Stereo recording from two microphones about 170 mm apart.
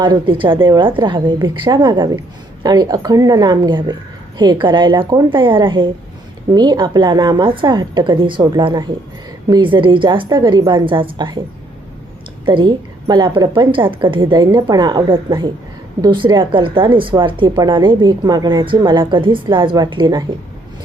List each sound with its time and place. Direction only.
0.0 s a woman's voice: 30° right (ahead or behind)
12.5 s a woman's voice: 30° right (ahead or behind)